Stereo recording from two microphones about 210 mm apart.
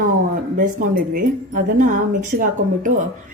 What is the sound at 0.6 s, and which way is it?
Speech, 40° right (ahead or behind).